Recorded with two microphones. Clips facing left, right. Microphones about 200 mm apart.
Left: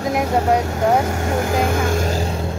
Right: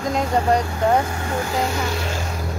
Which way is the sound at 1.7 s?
50° left (ahead or behind).